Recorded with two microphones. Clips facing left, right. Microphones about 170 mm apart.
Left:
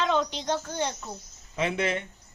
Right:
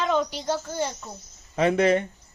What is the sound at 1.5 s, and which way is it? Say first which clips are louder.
Speech: right 8 dB; 45° right (ahead or behind).